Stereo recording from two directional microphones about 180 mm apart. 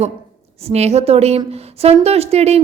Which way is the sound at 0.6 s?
35° right (ahead or behind).